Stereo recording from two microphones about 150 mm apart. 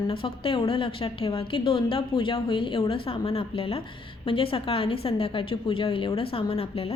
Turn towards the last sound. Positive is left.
turn(degrees=40)  # may be behind; listen again after turning